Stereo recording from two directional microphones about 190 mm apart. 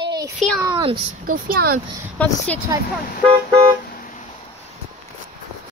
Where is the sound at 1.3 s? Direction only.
50° right (ahead or behind).